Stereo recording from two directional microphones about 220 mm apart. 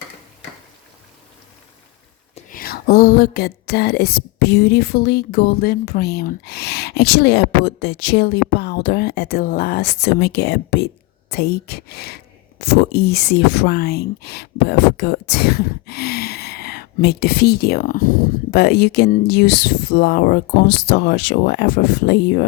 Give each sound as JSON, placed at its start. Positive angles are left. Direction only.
{"t": 2.3, "sound": "speech", "side_deg": 40}